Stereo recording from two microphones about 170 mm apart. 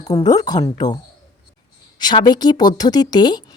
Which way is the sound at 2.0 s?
25° left (ahead or behind).